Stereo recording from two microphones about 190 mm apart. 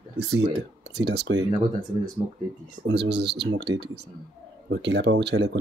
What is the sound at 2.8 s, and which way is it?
Speech, 60° right (ahead or behind).